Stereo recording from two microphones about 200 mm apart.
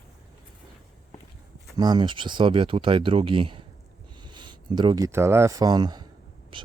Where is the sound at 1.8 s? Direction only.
20° right (ahead or behind).